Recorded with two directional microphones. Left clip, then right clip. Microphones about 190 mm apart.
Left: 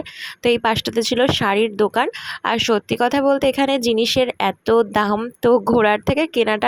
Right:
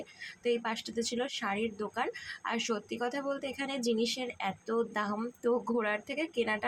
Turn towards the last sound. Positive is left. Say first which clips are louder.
# left 14 dB
turn(degrees=50)  # may be behind; listen again after turning